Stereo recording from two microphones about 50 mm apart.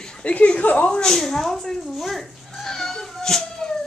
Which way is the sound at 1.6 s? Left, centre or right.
Centre.